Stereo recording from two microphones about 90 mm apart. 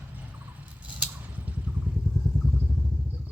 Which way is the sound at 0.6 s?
15° right (ahead or behind).